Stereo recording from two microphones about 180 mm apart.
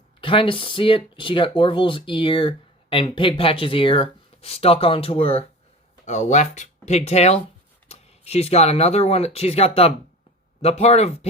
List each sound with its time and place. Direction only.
0.2 s speech: 30° left (ahead or behind)